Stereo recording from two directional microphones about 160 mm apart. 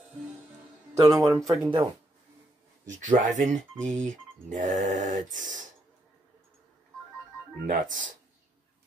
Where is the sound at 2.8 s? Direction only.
50° right (ahead or behind).